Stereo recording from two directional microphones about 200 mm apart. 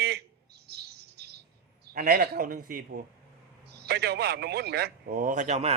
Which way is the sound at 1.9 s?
50° right (ahead or behind).